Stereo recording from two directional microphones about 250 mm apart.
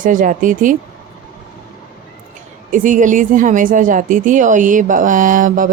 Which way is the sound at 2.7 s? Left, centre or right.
Right.